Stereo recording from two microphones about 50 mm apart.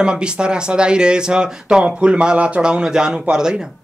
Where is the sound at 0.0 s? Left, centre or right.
Centre.